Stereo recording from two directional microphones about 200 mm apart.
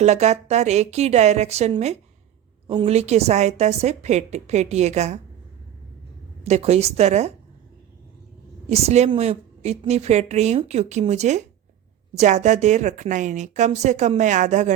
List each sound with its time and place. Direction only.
0.0 s a woman's voice: 35° right (ahead or behind)
6.4 s a woman's voice: 30° right (ahead or behind)
8.7 s a woman's voice: 30° right (ahead or behind)